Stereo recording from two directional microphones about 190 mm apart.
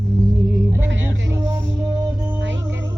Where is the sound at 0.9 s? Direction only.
75° right (ahead or behind).